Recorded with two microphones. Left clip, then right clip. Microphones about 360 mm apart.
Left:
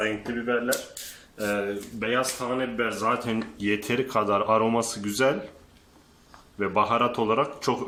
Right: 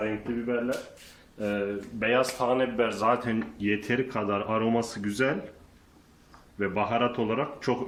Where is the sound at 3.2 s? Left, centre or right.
Centre.